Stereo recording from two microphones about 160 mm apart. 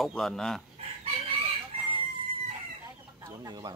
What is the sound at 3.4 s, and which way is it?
Speech, 25° right (ahead or behind).